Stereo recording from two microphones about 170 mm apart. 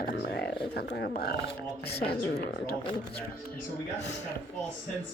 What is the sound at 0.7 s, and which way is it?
Speech, 65° left (ahead or behind).